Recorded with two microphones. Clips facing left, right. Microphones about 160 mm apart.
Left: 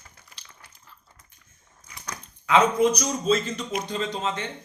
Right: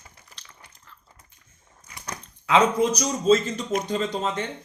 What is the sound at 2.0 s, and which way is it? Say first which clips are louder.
Speech: right 1 dB; 35° right (ahead or behind).